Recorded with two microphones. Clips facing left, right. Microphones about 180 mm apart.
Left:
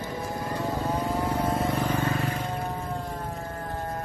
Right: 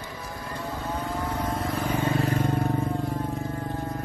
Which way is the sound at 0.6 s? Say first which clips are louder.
Left 3 dB; 40° left (ahead or behind).